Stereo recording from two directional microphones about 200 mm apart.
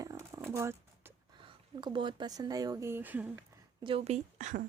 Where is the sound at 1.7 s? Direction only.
25° right (ahead or behind).